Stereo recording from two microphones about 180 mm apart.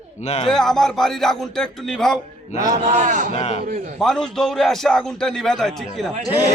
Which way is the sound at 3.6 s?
45° right (ahead or behind).